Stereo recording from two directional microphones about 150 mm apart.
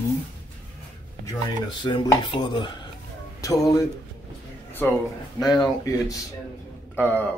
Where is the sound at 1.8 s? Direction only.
30° left (ahead or behind); by 5.0 s 15° left (ahead or behind).